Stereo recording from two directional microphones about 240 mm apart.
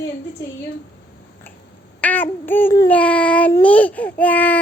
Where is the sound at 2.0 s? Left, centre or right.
Centre.